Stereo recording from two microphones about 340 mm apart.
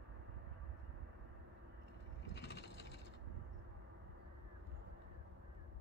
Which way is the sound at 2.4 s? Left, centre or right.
Left.